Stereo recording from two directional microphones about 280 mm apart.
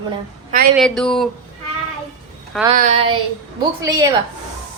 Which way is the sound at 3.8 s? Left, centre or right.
Centre.